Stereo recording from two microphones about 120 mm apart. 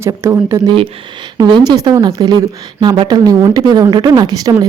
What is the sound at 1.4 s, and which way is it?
Speech, 35° right (ahead or behind).